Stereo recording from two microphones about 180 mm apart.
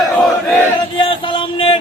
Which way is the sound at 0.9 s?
30° left (ahead or behind).